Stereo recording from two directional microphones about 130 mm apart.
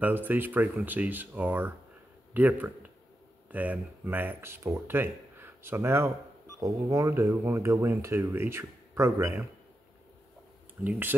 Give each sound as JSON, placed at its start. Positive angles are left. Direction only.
{"t": 0.0, "sound": "speech", "side_deg": -15}
{"t": 10.8, "sound": "speech", "side_deg": -15}